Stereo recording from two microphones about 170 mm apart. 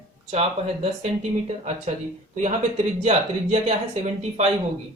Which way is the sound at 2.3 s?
45° right (ahead or behind).